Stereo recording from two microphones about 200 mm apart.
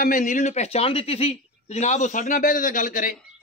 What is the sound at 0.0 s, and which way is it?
Speech, 40° left (ahead or behind).